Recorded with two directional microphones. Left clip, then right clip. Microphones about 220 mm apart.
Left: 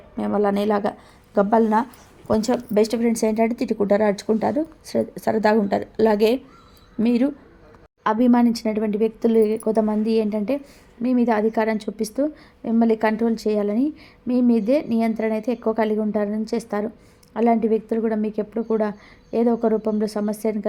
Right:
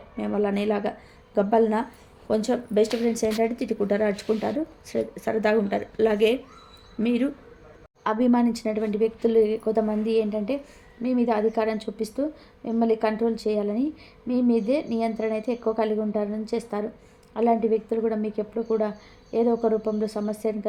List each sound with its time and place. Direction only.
0.2 s speech: 25° left (ahead or behind)